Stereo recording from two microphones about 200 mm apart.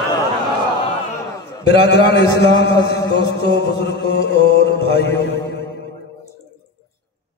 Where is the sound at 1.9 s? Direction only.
60° left (ahead or behind).